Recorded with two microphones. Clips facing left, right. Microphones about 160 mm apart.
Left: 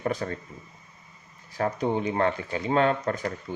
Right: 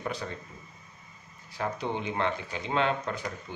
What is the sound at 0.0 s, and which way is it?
Speech, 50° left (ahead or behind).